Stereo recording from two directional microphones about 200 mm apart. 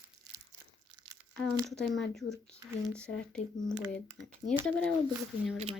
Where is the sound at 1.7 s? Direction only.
Centre (ahead or behind).